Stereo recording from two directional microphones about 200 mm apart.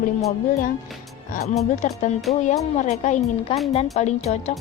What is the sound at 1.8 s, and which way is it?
Speech, 35° left (ahead or behind).